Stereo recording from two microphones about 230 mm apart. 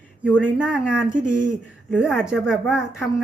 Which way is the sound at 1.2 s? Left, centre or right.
Right.